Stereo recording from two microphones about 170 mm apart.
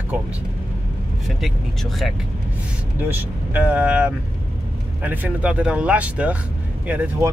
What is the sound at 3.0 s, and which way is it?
Speech, 10° right (ahead or behind).